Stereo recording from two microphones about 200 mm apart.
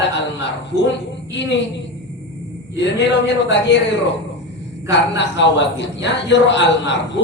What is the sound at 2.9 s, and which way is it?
A man's voice, 60° left (ahead or behind).